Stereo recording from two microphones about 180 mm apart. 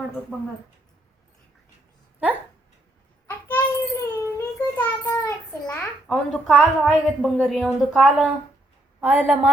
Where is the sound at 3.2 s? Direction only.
15° left (ahead or behind).